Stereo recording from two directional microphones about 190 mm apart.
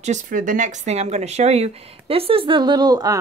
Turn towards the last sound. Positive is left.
turn(degrees=-20)  # may be behind; listen again after turning